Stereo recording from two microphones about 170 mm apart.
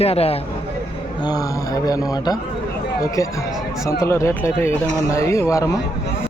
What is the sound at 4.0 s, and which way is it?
Speech, 15° left (ahead or behind).